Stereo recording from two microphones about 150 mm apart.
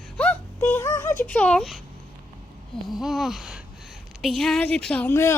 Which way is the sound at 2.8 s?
Centre (ahead or behind).